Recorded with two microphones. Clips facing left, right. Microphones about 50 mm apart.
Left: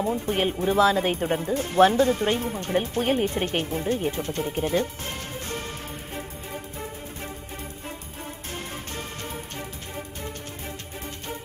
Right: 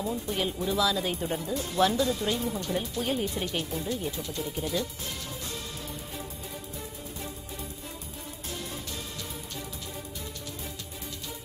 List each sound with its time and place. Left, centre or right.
0.0 s speech: left